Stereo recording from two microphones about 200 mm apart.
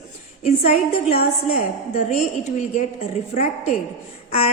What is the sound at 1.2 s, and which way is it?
A woman's voice, 45° left (ahead or behind).